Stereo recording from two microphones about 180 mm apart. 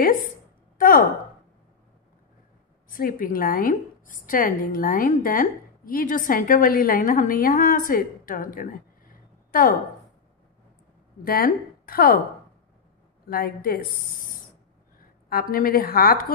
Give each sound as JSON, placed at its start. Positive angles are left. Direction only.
{"t": 0.7, "sound": "a sound", "side_deg": 50}
{"t": 2.9, "sound": "a woman's voice", "side_deg": 50}
{"t": 11.2, "sound": "speech", "side_deg": 55}
{"t": 13.3, "sound": "a woman's voice", "side_deg": 55}